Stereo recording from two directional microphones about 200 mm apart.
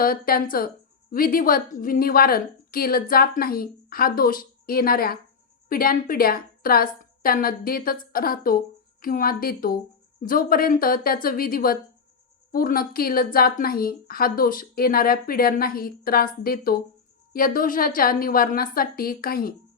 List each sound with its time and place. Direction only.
0.0 s a woman's voice: 45° left (ahead or behind)